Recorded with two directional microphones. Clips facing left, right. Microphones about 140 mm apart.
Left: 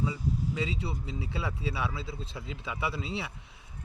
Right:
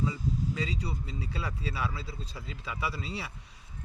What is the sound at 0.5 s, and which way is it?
Speech, 25° left (ahead or behind).